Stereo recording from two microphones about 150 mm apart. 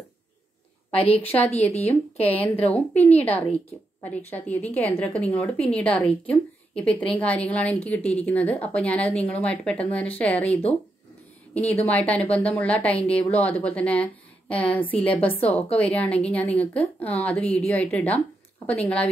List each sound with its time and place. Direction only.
0.9 s a woman's voice: 40° left (ahead or behind)
3.2 s a woman's voice: 10° left (ahead or behind)
11.6 s a woman's voice: 45° left (ahead or behind)
11.9 s a woman's voice: 10° left (ahead or behind)